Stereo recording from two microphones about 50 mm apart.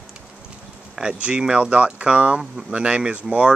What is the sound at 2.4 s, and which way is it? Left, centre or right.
Speech, centre.